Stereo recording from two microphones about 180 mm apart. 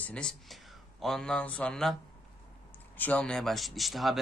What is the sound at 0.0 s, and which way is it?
Speech, 5° left (ahead or behind).